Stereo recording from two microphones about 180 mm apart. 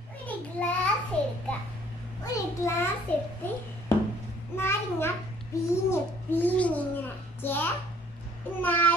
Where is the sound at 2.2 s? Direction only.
20° left (ahead or behind).